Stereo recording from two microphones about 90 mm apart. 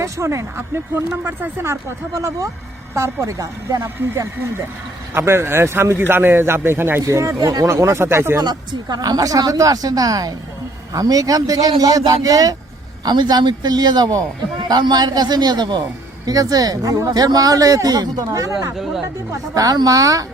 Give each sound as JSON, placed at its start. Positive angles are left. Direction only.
{"t": 0.0, "sound": "speech", "side_deg": -35}
{"t": 7.0, "sound": "speech", "side_deg": -35}
{"t": 8.4, "sound": "speech", "side_deg": -50}